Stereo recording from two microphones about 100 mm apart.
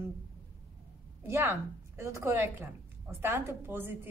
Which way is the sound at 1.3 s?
25° right (ahead or behind).